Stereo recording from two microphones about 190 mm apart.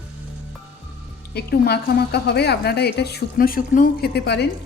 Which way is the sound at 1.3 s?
55° left (ahead or behind).